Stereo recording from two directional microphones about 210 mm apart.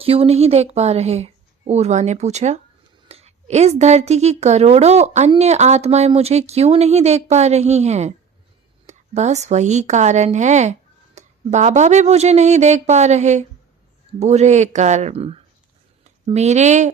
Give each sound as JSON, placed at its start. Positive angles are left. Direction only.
{"t": 0.0, "sound": "a woman's voice", "side_deg": -30}